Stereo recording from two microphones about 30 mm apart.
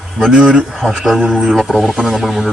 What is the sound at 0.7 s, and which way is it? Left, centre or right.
Speech, centre.